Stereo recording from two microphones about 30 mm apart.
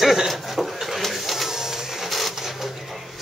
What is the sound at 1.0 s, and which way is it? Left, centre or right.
Printer, centre.